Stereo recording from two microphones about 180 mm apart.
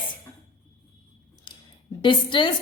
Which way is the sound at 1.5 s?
25° left (ahead or behind).